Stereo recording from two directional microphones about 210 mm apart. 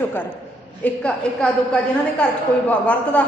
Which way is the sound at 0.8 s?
5° left (ahead or behind).